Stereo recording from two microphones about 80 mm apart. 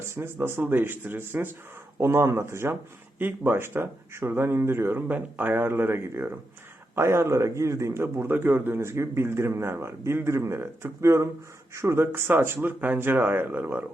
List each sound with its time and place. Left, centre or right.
0.1 s speech: right